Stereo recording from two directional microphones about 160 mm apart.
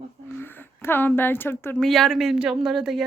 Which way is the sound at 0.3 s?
10° left (ahead or behind).